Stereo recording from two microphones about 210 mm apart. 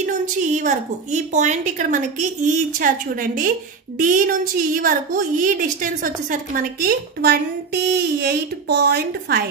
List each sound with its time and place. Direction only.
0.0 s a woman's voice: 35° right (ahead or behind)